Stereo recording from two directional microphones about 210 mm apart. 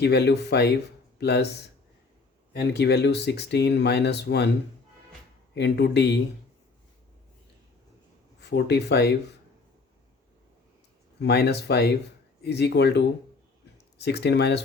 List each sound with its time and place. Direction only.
0.0 s speech: 50° left (ahead or behind)
2.5 s speech: 55° left (ahead or behind)
5.5 s speech: 55° left (ahead or behind)
8.4 s speech: 55° left (ahead or behind)
11.2 s speech: 50° left (ahead or behind)